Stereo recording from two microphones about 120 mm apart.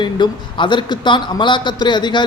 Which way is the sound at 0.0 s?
40° left (ahead or behind).